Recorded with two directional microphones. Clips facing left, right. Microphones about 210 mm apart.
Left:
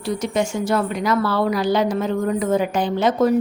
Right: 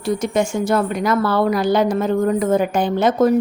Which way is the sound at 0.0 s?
50° right (ahead or behind).